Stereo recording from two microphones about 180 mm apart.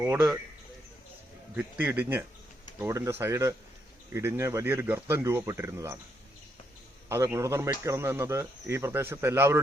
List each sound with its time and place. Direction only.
0.0 s speech: 15° right (ahead or behind)
1.5 s speech: 10° right (ahead or behind)
7.1 s speech: 15° right (ahead or behind)